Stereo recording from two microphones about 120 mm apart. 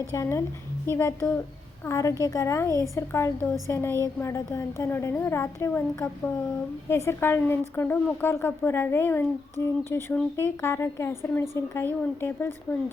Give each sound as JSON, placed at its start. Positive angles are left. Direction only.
{"t": 0.0, "sound": "a woman's voice", "side_deg": 25}